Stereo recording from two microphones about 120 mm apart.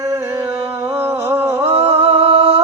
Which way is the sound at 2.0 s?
55° right (ahead or behind).